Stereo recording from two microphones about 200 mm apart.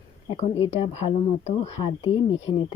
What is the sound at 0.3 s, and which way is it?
Speech, 30° left (ahead or behind).